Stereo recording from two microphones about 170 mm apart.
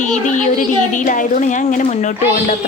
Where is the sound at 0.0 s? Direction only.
45° left (ahead or behind).